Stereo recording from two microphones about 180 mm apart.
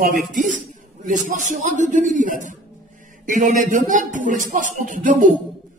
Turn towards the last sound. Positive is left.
turn(degrees=-45)  # may be behind; listen again after turning